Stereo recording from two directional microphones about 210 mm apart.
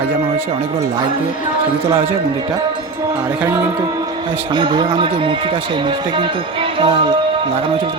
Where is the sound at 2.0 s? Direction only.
20° right (ahead or behind).